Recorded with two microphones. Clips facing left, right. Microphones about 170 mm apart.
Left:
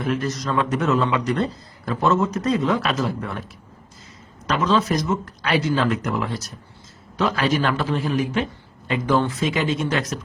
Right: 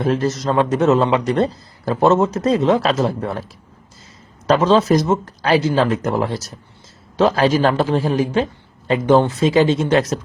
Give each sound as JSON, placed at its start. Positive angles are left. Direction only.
{"t": 0.0, "sound": "a man's voice", "side_deg": -30}
{"t": 4.4, "sound": "a man's voice", "side_deg": -30}